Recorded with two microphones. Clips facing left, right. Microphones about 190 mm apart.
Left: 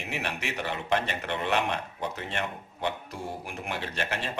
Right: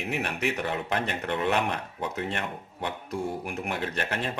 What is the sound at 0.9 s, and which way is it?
Speech, 45° right (ahead or behind).